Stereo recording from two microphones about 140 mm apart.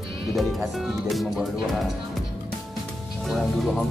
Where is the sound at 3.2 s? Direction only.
Centre (ahead or behind).